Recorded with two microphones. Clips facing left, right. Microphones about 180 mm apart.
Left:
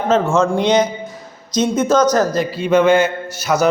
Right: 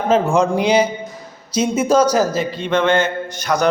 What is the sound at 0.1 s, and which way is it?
Speech, 10° right (ahead or behind).